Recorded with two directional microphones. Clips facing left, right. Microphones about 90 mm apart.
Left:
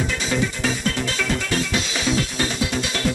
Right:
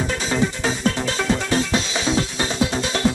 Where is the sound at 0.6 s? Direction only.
30° right (ahead or behind).